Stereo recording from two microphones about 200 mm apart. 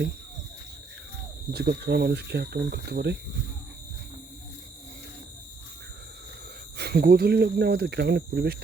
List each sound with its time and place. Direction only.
1.5 s speech: 55° right (ahead or behind)
6.7 s speech: 50° right (ahead or behind)